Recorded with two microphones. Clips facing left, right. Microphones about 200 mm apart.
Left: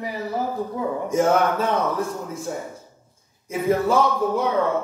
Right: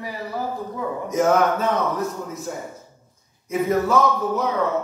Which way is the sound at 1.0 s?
30° left (ahead or behind).